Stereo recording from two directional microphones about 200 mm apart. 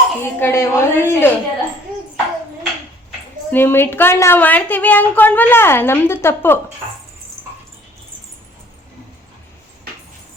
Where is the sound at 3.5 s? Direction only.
10° left (ahead or behind).